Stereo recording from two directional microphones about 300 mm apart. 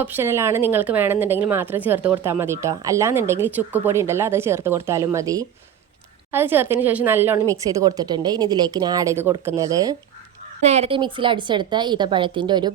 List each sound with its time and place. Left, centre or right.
0.0 s a woman's voice: centre